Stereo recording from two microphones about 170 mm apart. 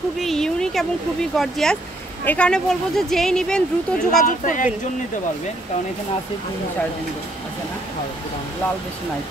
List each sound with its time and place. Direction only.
0.2 s a sound: centre (ahead or behind)
1.3 s speech: centre (ahead or behind)
4.3 s speech: 50° left (ahead or behind)